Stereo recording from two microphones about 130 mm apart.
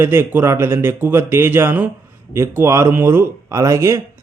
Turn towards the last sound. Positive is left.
turn(degrees=-25)  # may be behind; listen again after turning